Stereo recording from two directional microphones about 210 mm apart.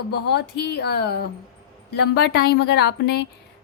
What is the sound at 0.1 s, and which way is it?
A woman's voice, 50° left (ahead or behind).